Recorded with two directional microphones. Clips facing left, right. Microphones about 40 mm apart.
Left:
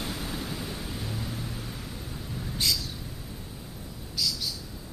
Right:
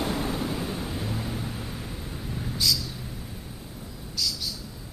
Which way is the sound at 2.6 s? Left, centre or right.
Left.